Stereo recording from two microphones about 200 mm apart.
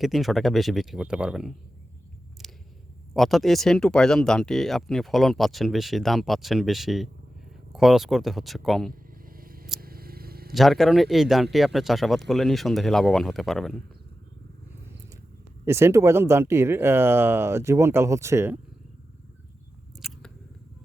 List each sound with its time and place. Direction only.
0.0 s speech: centre (ahead or behind)
2.4 s a sound: centre (ahead or behind)
3.2 s speech: centre (ahead or behind)
8.9 s vehicle: 45° right (ahead or behind)
9.8 s scissors: 50° right (ahead or behind)
10.5 s speech: centre (ahead or behind)
15.6 s speech: 10° right (ahead or behind)
20.0 s single-lens reflex camera: centre (ahead or behind)